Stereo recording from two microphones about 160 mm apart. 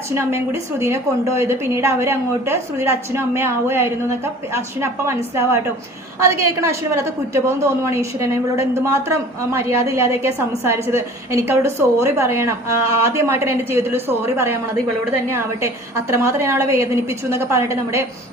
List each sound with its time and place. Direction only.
0.2 s a woman's voice: 15° right (ahead or behind)